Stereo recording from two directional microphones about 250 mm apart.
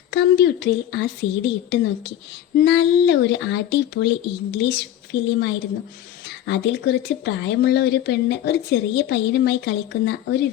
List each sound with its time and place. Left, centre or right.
0.1 s speech: left
6.2 s speech: left